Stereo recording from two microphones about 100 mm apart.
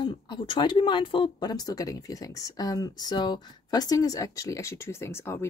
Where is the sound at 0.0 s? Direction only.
50° left (ahead or behind).